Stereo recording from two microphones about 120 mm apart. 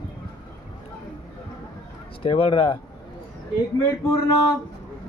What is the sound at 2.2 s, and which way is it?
Speech, 50° left (ahead or behind).